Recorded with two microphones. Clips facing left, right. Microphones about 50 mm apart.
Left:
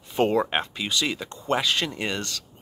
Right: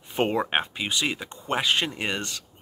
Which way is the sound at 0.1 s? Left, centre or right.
Right.